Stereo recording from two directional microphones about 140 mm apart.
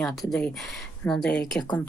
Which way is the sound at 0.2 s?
5° left (ahead or behind).